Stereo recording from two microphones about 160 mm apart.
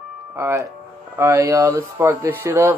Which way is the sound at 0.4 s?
15° right (ahead or behind).